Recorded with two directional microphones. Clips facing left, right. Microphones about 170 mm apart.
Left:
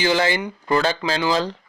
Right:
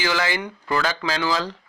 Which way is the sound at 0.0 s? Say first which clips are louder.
Left 4 dB; 25° left (ahead or behind).